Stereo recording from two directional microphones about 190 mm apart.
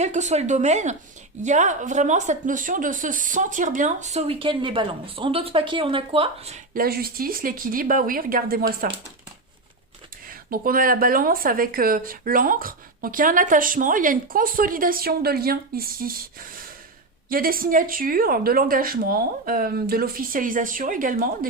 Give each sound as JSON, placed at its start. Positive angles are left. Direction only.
{"t": 0.0, "sound": "speech", "side_deg": -40}
{"t": 6.7, "sound": "a woman's voice", "side_deg": -55}
{"t": 10.2, "sound": "a woman's voice", "side_deg": -50}
{"t": 17.2, "sound": "a woman's voice", "side_deg": -50}